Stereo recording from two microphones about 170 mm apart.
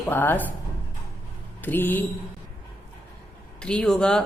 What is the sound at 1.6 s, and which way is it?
Speech, 10° left (ahead or behind).